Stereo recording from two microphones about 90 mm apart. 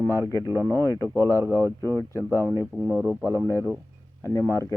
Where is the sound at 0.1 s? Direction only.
35° left (ahead or behind).